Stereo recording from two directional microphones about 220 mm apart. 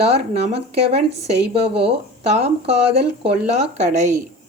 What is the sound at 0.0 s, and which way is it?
A woman's voice, 30° right (ahead or behind).